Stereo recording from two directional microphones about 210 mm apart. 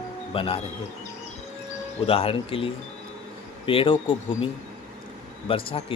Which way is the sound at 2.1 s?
25° left (ahead or behind).